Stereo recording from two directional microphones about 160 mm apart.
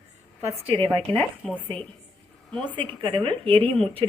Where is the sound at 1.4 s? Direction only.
5° left (ahead or behind).